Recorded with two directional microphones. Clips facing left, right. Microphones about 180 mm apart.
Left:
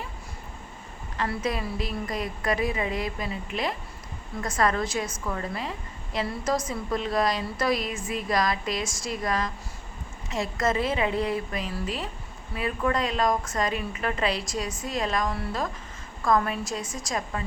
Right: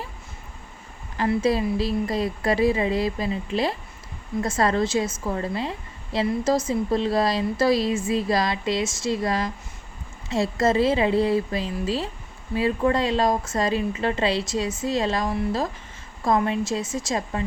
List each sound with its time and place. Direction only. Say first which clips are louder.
1.1 s a woman's voice: right 7 dB; 30° right (ahead or behind)